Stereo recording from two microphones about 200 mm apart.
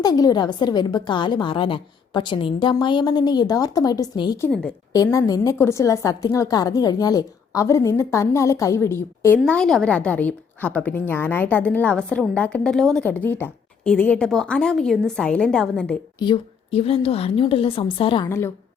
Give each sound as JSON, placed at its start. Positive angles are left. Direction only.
{"t": 0.0, "sound": "a woman's voice", "side_deg": 20}
{"t": 4.4, "sound": "a woman's voice", "side_deg": 5}
{"t": 5.1, "sound": "a woman's voice", "side_deg": 20}
{"t": 16.1, "sound": "a woman's voice", "side_deg": 25}
{"t": 18.3, "sound": "a woman's voice", "side_deg": 15}